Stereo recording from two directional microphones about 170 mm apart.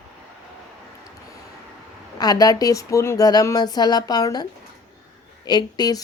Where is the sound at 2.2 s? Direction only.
20° left (ahead or behind).